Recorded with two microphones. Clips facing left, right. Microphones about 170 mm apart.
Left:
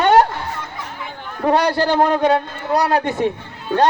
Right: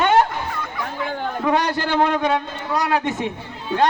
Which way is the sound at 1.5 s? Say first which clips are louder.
Left 5 dB; 40° left (ahead or behind).